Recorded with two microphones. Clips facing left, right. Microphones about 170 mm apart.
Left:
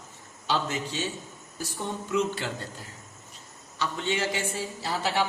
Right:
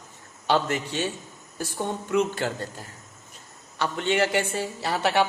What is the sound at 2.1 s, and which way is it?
Speech, 50° right (ahead or behind).